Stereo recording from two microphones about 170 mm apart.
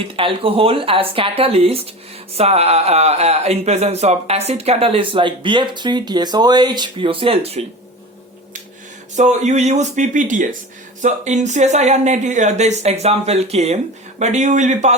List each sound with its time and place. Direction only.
0.0 s speech: 30° right (ahead or behind)
9.1 s speech: 45° right (ahead or behind)